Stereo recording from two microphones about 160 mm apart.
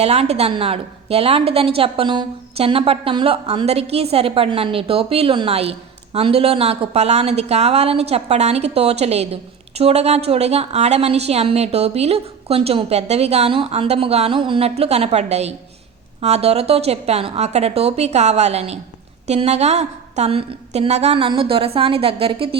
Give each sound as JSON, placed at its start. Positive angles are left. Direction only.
{"t": 0.0, "sound": "a woman's voice", "side_deg": -40}